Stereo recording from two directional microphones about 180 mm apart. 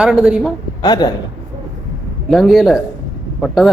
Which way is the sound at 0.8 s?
20° left (ahead or behind).